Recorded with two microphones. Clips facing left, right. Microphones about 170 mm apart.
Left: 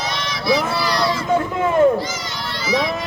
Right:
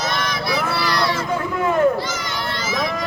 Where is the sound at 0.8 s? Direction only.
60° right (ahead or behind).